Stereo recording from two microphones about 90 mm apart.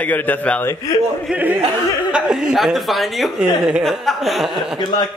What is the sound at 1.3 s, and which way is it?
Speech, 15° right (ahead or behind).